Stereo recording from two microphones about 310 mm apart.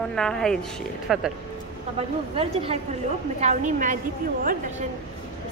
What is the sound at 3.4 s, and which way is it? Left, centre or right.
Speech, right.